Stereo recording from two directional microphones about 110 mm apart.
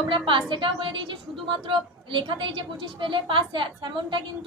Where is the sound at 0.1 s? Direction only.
50° right (ahead or behind).